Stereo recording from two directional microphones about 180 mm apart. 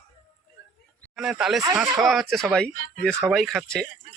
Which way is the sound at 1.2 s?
5° right (ahead or behind).